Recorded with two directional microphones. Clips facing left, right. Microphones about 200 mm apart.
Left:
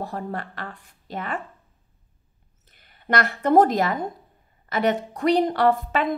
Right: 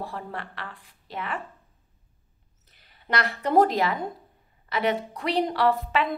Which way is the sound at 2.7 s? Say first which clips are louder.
Left 5 dB; 50° left (ahead or behind).